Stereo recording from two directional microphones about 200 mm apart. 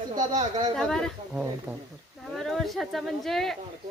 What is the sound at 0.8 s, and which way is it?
Speech, 5° left (ahead or behind).